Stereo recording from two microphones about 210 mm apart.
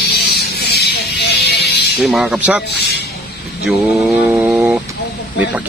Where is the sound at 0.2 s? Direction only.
50° left (ahead or behind).